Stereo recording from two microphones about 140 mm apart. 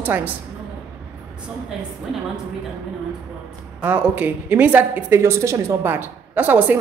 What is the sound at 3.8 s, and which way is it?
A woman's voice, 15° right (ahead or behind).